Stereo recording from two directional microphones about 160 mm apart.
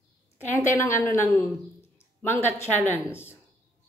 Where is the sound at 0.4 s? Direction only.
15° left (ahead or behind).